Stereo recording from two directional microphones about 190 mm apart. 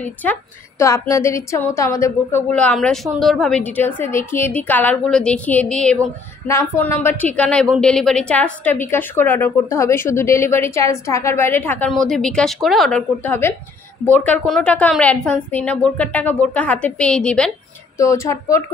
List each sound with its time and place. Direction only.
0.0 s a woman's voice: 10° left (ahead or behind)
2.5 s a woman's voice: 5° left (ahead or behind)
17.9 s a woman's voice: 15° left (ahead or behind)